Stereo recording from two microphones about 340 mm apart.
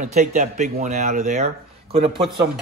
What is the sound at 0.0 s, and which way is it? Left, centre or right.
Speech, right.